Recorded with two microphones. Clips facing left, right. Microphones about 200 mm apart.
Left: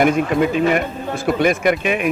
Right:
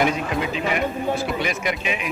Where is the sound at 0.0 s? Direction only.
50° left (ahead or behind).